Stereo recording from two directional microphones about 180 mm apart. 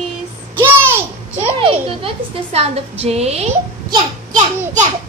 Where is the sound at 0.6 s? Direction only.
10° right (ahead or behind).